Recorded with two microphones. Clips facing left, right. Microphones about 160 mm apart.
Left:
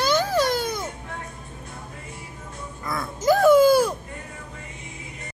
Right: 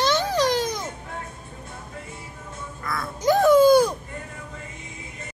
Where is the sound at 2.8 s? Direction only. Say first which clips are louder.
Left 1 dB; 20° left (ahead or behind).